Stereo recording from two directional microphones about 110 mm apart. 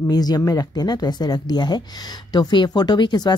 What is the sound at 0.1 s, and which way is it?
Speech, 35° left (ahead or behind).